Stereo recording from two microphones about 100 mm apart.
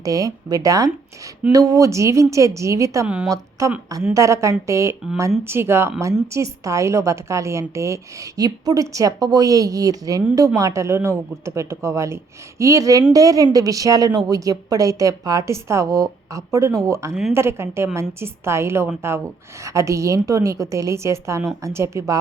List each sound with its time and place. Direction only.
0.0 s a woman's voice: 35° right (ahead or behind)